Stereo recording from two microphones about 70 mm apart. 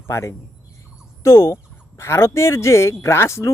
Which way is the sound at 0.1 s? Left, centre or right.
Left.